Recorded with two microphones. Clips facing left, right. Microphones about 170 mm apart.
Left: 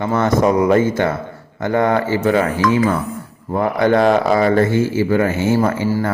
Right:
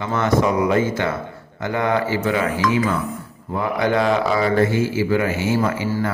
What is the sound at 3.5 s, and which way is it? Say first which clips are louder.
A man's voice: left 5 dB; 50° left (ahead or behind).